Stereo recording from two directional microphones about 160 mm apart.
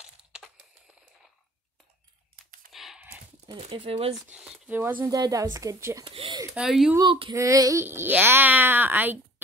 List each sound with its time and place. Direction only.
0.3 s crumpling: 5° right (ahead or behind)
2.7 s computer keyboard: centre (ahead or behind)
3.4 s speech: 35° right (ahead or behind)
4.3 s speech: 5° right (ahead or behind)
5.0 s speech: 25° right (ahead or behind)
6.0 s speech: 30° right (ahead or behind)
6.5 s speech: 5° right (ahead or behind)
7.0 s speech: 30° right (ahead or behind); by 9.2 s 10° right (ahead or behind)